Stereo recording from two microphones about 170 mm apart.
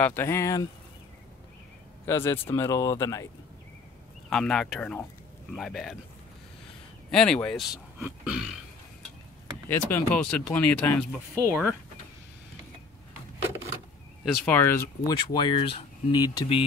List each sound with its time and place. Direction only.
0.0 s speech: 15° left (ahead or behind)
2.0 s speech: 15° left (ahead or behind)
4.3 s speech: 5° left (ahead or behind)
7.1 s speech: 5° left (ahead or behind)
9.7 s speech: 10° left (ahead or behind)
11.4 s speech: 10° right (ahead or behind)
14.2 s speech: 10° left (ahead or behind)
15.1 s speech: 30° left (ahead or behind)